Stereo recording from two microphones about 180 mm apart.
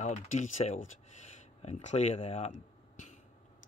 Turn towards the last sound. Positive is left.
turn(degrees=40)  # may be behind; listen again after turning